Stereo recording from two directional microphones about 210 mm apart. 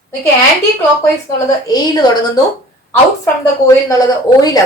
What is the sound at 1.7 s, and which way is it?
Speech, 20° left (ahead or behind).